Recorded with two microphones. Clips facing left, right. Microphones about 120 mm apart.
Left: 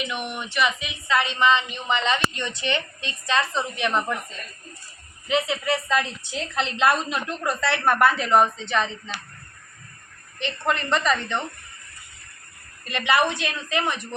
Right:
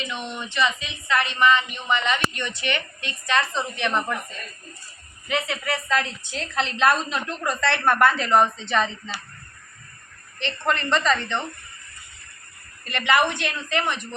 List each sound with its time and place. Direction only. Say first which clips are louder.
0.1 s speech: left 1 dB; 15° left (ahead or behind)
5.3 s speech: left 3 dB; 20° left (ahead or behind); by 9.2 s centre (ahead or behind)
10.4 s speech: even; 15° left (ahead or behind)
12.8 s a woman's voice: right 1 dB; 15° left (ahead or behind)